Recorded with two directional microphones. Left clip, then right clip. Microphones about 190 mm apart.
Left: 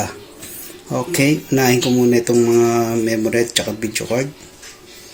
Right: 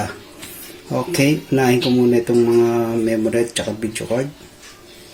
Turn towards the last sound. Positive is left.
turn(degrees=0)  # may be behind; listen again after turning